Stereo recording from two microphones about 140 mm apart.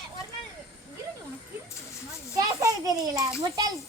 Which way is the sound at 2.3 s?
25° right (ahead or behind).